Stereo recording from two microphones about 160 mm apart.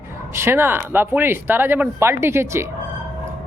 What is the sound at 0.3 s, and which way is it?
A woman's voice, 15° right (ahead or behind).